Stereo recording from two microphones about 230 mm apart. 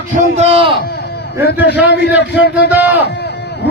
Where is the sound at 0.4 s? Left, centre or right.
Right.